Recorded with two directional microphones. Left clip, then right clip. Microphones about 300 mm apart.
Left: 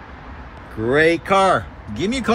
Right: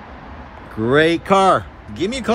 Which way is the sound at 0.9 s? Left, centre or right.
Right.